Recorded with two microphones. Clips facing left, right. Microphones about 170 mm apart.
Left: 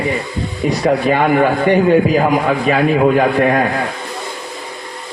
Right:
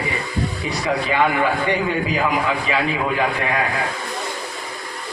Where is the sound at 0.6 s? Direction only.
50° left (ahead or behind).